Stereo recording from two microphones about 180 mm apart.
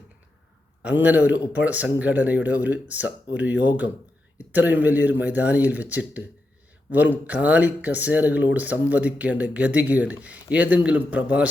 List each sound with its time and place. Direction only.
0.8 s speech: 5° right (ahead or behind)